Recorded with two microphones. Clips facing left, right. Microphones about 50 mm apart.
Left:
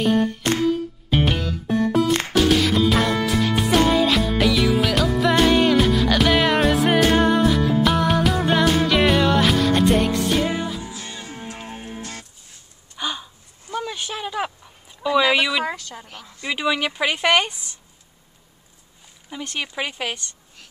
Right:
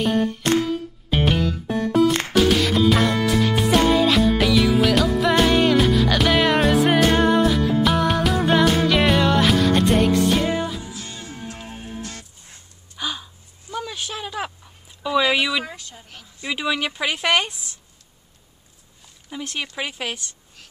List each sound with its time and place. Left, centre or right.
0.0 s music: centre
10.9 s music: left
12.9 s a sound: centre
15.6 s a sound: left
16.4 s speech: centre
19.3 s speech: centre